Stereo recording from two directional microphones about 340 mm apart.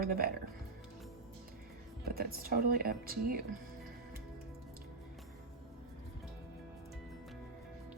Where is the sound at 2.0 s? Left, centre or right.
Right.